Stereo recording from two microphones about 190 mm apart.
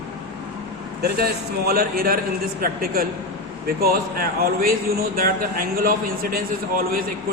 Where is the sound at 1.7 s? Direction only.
50° right (ahead or behind).